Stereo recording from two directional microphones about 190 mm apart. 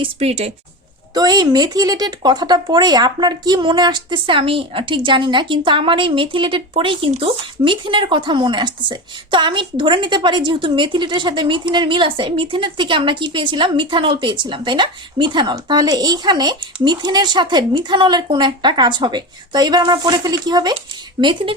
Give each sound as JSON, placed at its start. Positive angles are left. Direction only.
{"t": 0.0, "sound": "speech", "side_deg": -35}
{"t": 1.1, "sound": "speech", "side_deg": -20}